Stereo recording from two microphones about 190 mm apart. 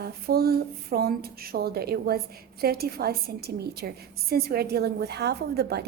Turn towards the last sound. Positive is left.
turn(degrees=-60)  # may be behind; listen again after turning